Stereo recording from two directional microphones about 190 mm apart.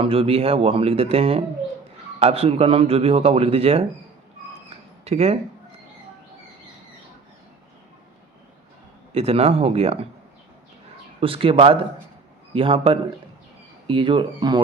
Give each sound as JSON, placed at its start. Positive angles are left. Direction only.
{"t": 0.0, "sound": "speech", "side_deg": -30}
{"t": 5.0, "sound": "speech", "side_deg": -35}
{"t": 9.1, "sound": "speech", "side_deg": -30}
{"t": 11.2, "sound": "speech", "side_deg": -30}